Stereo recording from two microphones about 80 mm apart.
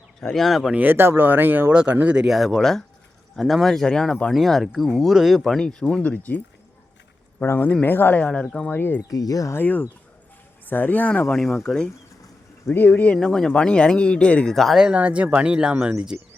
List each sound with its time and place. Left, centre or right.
0.2 s speech: centre
0.7 s speech: right; by 6.4 s centre
7.6 s speech: left
8.2 s speech: centre
9.0 s speech: left
9.5 s speech: left
11.3 s speech: centre
12.6 s speech: left
13.1 s speech: centre
14.5 s speech: centre
14.8 s speech: centre